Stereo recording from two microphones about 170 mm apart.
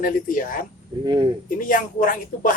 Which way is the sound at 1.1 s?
25° right (ahead or behind).